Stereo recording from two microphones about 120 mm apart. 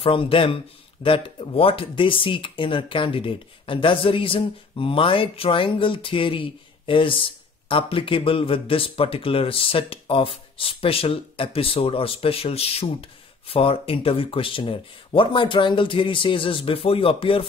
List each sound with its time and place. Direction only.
0.0 s speech: 50° left (ahead or behind)